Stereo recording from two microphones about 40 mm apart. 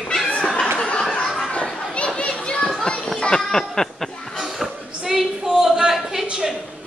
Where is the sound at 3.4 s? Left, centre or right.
Centre.